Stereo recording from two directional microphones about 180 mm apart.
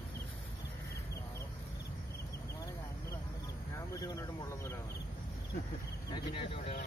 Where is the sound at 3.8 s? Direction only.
20° left (ahead or behind).